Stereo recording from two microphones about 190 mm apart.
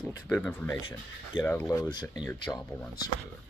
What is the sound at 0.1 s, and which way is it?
Speech, 10° left (ahead or behind).